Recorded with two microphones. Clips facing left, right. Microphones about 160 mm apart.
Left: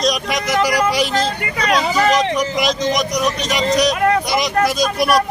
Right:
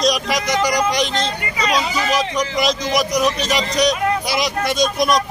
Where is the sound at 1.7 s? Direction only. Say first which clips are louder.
Left 5 dB; 55° left (ahead or behind).